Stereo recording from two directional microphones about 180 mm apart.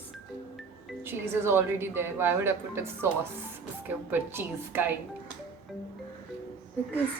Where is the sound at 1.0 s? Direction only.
15° right (ahead or behind).